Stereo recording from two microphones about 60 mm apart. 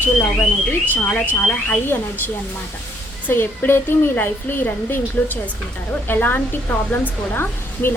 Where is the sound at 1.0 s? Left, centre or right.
Left.